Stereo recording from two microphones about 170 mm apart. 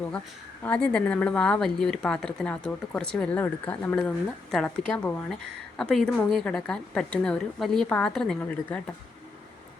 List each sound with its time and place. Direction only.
0.6 s a woman's voice: 5° left (ahead or behind)